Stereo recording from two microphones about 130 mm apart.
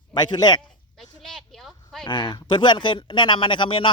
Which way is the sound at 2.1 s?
35° left (ahead or behind).